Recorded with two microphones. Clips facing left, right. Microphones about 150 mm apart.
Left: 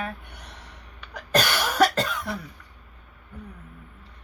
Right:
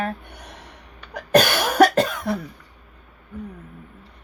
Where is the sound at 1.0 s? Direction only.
55° right (ahead or behind).